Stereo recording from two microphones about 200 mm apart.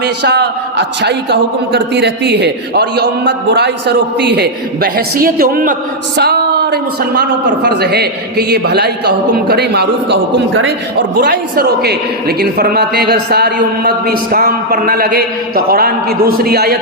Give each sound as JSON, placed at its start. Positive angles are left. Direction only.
{"t": 0.0, "sound": "a man's voice", "side_deg": -55}